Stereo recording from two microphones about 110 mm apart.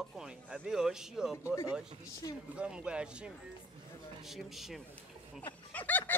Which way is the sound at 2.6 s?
10° right (ahead or behind).